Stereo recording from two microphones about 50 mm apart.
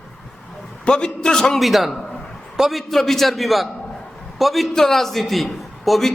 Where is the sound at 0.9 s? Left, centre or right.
Centre.